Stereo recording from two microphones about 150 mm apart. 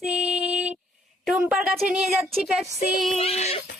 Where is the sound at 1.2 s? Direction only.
5° right (ahead or behind).